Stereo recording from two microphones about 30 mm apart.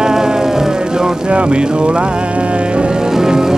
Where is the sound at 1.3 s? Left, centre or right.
Right.